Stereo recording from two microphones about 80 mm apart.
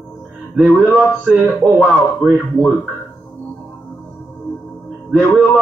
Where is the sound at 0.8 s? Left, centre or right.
Centre.